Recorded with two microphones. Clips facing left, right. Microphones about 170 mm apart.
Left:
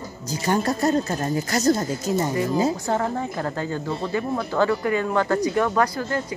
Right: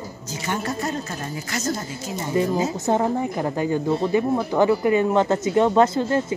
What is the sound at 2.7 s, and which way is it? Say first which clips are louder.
A woman's voice: right 3 dB; 20° right (ahead or behind).